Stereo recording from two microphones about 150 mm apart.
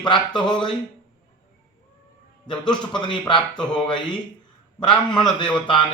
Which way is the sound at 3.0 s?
30° left (ahead or behind).